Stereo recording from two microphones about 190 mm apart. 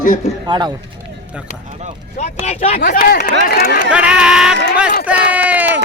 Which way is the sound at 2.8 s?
55° left (ahead or behind).